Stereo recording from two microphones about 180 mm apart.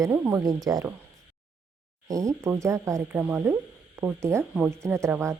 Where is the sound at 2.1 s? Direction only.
20° right (ahead or behind).